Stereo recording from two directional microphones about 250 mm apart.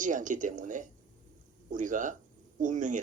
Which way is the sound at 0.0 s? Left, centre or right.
Right.